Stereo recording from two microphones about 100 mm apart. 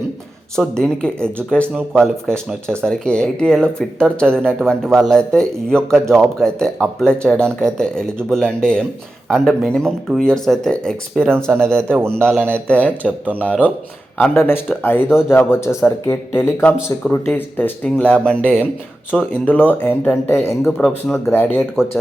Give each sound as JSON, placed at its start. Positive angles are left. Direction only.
{"t": 0.5, "sound": "a man's voice", "side_deg": 5}